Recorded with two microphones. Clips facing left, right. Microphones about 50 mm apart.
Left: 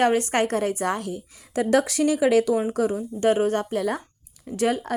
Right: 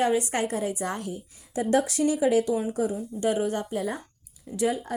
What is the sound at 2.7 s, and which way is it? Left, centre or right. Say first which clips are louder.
Speech: left 4 dB; left.